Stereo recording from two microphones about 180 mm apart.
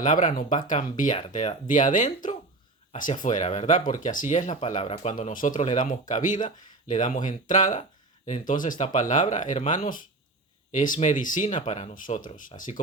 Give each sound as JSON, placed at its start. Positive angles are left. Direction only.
{"t": 0.0, "sound": "speech", "side_deg": 45}